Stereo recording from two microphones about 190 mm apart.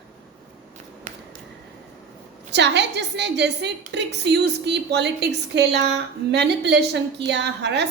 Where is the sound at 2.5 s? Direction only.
65° right (ahead or behind).